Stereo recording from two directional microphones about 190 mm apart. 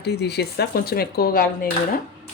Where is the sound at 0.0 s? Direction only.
60° left (ahead or behind).